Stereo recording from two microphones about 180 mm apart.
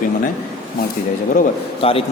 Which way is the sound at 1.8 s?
30° left (ahead or behind).